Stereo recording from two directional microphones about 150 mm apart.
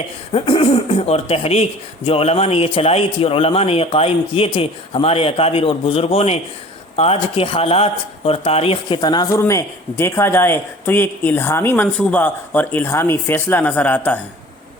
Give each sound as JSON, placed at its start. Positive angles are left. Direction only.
{"t": 0.3, "sound": "speech", "side_deg": 40}
{"t": 9.0, "sound": "speech", "side_deg": 25}